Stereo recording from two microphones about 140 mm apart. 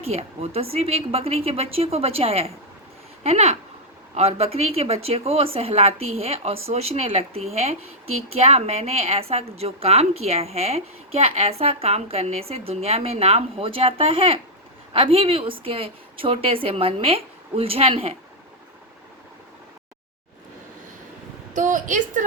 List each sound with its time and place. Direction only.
0.1 s a woman's voice: 45° right (ahead or behind)
21.5 s a woman's voice: 65° right (ahead or behind)